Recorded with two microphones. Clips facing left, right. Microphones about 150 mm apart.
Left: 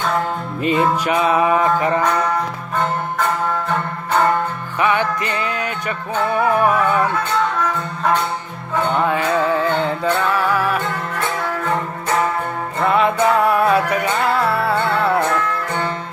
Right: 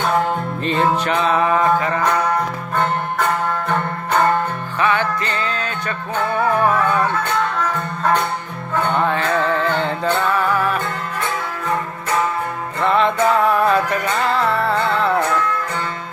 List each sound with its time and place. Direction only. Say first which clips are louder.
0.6 s music: left 2 dB; 10° left (ahead or behind)
4.8 s music: left 1 dB; 15° left (ahead or behind)
8.7 s music: left 1 dB; 10° left (ahead or behind)
12.8 s music: even; 5° left (ahead or behind)